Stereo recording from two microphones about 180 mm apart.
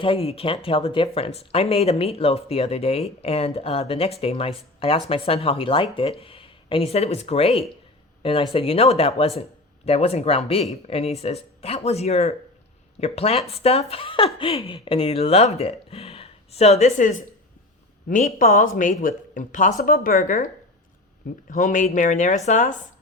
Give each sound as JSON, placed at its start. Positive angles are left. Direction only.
{"t": 0.0, "sound": "speech", "side_deg": 30}
{"t": 21.5, "sound": "speech", "side_deg": 45}